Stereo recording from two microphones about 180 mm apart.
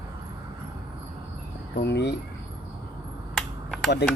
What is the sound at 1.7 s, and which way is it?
Speech, 70° left (ahead or behind).